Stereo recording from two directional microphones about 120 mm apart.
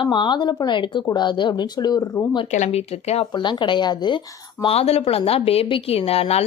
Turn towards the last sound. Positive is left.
turn(degrees=55)  # may be behind; listen again after turning